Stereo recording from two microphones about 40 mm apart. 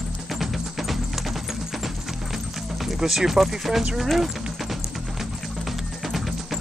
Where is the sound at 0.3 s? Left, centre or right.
Centre.